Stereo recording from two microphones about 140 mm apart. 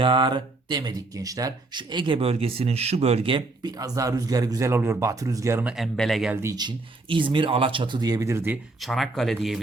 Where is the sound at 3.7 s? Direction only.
25° right (ahead or behind).